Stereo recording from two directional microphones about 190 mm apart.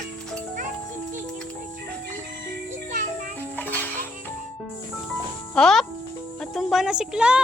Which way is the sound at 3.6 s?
10° left (ahead or behind).